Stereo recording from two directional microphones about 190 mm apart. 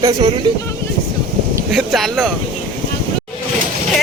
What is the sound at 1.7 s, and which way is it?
Speech, centre (ahead or behind).